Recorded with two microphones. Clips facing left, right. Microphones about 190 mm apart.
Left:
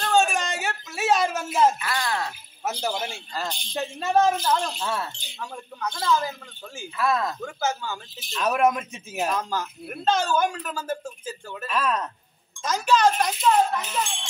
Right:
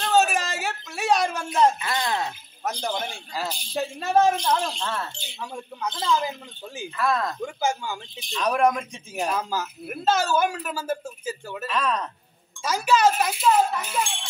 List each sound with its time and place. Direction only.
0.0 s a sound: 5° right (ahead or behind)
1.8 s speech: 20° right (ahead or behind)
2.6 s speech: 5° left (ahead or behind)
3.3 s speech: 5° right (ahead or behind); by 5.3 s 10° left (ahead or behind)
5.3 s a woman's voice: 10° right (ahead or behind)
7.0 s speech: 5° left (ahead or behind)
7.4 s a woman's voice: 10° right (ahead or behind)
8.2 s speech: 5° left (ahead or behind)
9.3 s a woman's voice: 5° right (ahead or behind)
11.6 s speech: 5° left (ahead or behind)
12.6 s a woman's voice: 10° right (ahead or behind)